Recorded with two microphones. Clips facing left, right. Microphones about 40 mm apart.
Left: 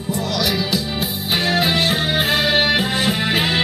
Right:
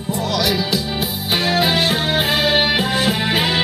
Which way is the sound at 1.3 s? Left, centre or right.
Centre.